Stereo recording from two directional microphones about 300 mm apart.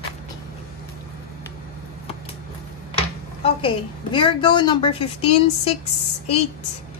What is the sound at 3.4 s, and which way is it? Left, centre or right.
A woman's voice, centre.